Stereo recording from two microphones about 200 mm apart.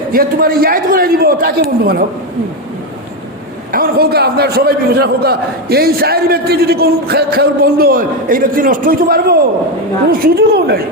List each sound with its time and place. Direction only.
0.1 s a man's voice: 45° right (ahead or behind)
3.7 s a man's voice: 50° right (ahead or behind)